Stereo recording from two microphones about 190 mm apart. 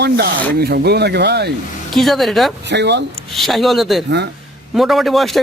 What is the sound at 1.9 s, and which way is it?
Speech, centre (ahead or behind).